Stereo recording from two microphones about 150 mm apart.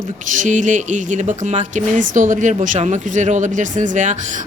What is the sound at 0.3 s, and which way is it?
Speech, 55° right (ahead or behind).